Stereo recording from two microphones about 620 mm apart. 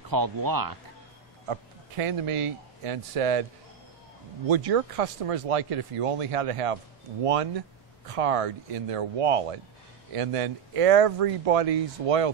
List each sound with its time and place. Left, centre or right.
0.1 s speech: right
1.5 s a man's voice: right
4.5 s speech: right